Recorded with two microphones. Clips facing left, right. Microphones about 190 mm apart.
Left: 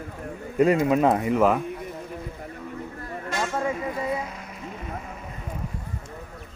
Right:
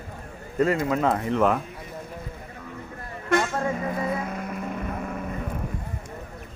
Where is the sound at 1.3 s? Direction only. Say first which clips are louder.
Left 2 dB; 5° left (ahead or behind).